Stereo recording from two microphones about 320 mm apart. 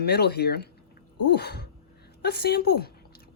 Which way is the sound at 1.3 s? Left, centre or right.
Left.